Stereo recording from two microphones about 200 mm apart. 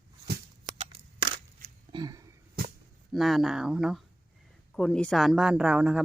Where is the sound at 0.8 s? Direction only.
30° right (ahead or behind).